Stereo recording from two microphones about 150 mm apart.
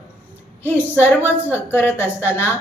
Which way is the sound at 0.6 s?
15° left (ahead or behind).